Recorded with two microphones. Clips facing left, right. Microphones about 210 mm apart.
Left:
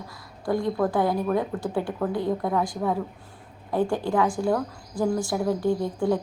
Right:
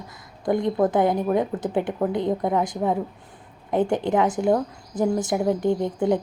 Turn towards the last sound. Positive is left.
turn(degrees=-20)  # may be behind; listen again after turning